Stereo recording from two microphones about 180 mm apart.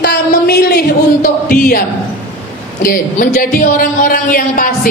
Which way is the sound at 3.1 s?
50° left (ahead or behind).